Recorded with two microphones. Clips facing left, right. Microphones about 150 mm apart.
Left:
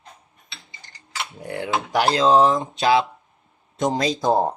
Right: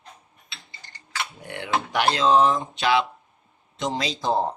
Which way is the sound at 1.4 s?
35° left (ahead or behind).